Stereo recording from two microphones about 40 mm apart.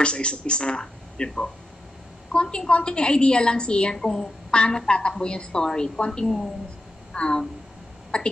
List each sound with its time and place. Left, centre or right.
0.0 s a woman's voice: left
6.2 s a woman's voice: centre
7.2 s a woman's voice: left